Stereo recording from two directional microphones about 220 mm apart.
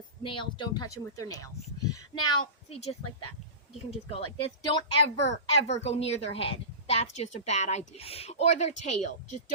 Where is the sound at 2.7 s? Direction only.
30° left (ahead or behind).